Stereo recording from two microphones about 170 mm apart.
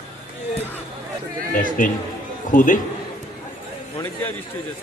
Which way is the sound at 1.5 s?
50° left (ahead or behind).